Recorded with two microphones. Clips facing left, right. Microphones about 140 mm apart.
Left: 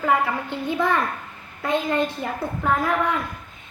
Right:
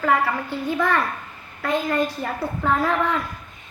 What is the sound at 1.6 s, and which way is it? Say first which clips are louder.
A woman's voice: even; 20° left (ahead or behind).